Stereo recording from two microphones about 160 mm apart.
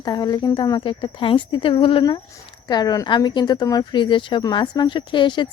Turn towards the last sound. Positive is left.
turn(degrees=30)  # may be behind; listen again after turning